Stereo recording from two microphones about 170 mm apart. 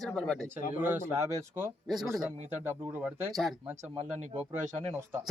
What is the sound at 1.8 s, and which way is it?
Speech, centre (ahead or behind).